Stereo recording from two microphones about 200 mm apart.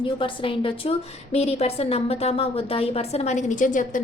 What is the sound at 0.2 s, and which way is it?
A woman's voice, 25° left (ahead or behind).